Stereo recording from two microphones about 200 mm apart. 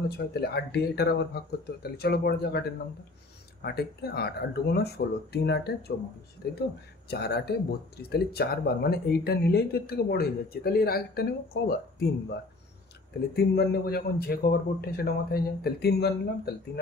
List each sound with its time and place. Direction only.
0.3 s speech: 55° left (ahead or behind)
3.6 s speech: 55° left (ahead or behind)
13.3 s speech: 55° left (ahead or behind)